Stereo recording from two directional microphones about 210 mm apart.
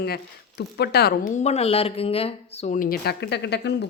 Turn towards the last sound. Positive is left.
turn(degrees=55)  # may be behind; listen again after turning